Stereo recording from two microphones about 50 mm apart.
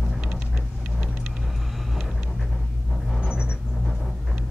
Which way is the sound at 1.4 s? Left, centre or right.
Centre.